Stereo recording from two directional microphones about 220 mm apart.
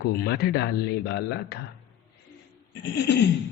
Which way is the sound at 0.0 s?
45° left (ahead or behind).